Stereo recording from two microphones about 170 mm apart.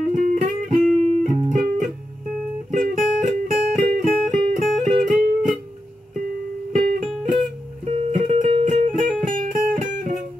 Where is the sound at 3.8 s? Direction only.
Centre (ahead or behind).